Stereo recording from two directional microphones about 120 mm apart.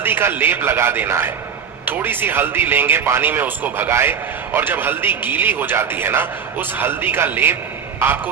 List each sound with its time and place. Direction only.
0.0 s a man's voice: 20° right (ahead or behind)